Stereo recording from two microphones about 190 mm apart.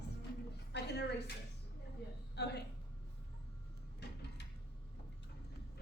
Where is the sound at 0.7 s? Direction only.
60° left (ahead or behind).